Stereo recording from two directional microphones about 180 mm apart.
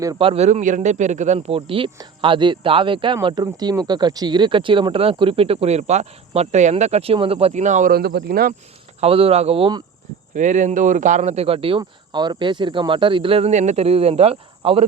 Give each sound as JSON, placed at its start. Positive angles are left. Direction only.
{"t": 0.2, "sound": "speech", "side_deg": -35}
{"t": 9.0, "sound": "speech", "side_deg": -30}
{"t": 10.3, "sound": "speech", "side_deg": -40}